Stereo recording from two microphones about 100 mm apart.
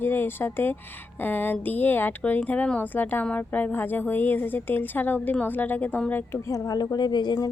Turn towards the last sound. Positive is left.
turn(degrees=45)  # may be behind; listen again after turning